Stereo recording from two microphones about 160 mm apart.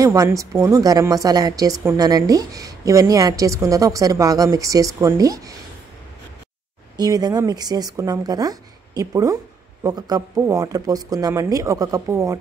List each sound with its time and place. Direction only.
0.0 s a woman's voice: 20° right (ahead or behind)
7.0 s a woman's voice: 25° right (ahead or behind)